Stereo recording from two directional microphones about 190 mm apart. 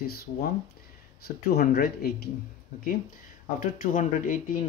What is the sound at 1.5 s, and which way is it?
Speech, 55° left (ahead or behind).